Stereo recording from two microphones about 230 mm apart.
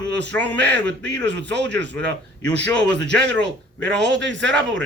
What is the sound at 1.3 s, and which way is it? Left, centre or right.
Speech, right.